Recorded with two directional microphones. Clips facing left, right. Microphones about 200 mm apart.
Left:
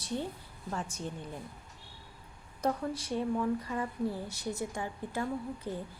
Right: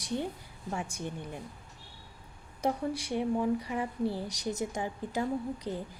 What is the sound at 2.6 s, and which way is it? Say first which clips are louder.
A woman's voice: right 1 dB; 10° right (ahead or behind).